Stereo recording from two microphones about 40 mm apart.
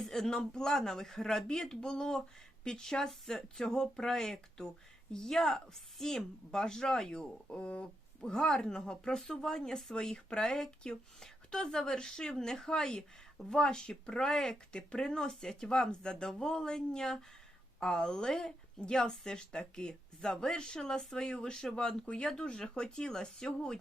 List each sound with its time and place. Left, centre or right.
0.0 s speech: centre
7.5 s speech: left
8.2 s speech: centre